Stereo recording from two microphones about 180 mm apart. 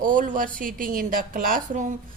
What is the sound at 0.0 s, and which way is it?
Speech, 45° right (ahead or behind).